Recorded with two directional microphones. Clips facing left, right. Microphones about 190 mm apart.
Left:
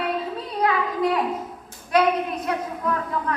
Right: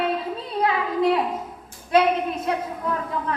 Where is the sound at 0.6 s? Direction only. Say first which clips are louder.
Right 1 dB; 25° right (ahead or behind).